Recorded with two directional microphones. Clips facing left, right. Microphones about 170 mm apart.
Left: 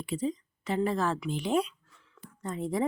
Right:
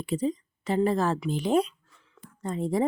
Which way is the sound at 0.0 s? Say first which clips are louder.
Right 4 dB; 40° right (ahead or behind).